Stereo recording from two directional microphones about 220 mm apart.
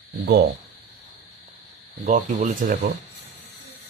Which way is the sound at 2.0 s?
30° right (ahead or behind).